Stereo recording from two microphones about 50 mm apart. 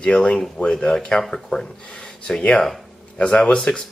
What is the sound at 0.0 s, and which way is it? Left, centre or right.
Speech, centre.